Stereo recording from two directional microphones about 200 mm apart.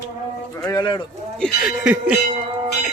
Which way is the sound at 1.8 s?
5° right (ahead or behind).